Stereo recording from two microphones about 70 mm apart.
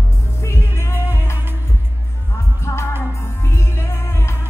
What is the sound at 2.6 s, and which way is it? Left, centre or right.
Music, left.